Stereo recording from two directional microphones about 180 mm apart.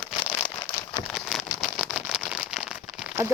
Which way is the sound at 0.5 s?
20° left (ahead or behind).